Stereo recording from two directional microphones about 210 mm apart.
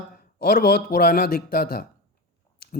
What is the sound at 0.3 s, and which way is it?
Speech, 45° left (ahead or behind).